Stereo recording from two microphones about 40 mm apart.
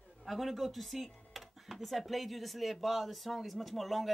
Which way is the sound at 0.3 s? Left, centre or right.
Centre.